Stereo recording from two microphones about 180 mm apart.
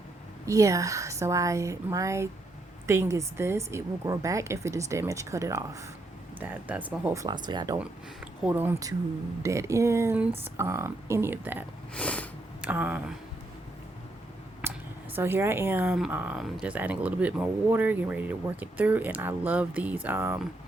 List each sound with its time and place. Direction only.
0.4 s speech: 15° right (ahead or behind)
8.4 s speech: 10° right (ahead or behind)
11.9 s a sound: 5° left (ahead or behind)
12.6 s speech: 10° right (ahead or behind)
14.6 s a sound: 15° right (ahead or behind)
15.1 s speech: 10° right (ahead or behind)